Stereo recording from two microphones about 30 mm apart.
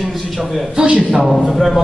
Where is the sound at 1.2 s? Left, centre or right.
Centre.